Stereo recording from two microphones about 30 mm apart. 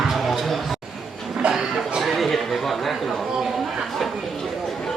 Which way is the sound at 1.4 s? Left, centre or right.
Right.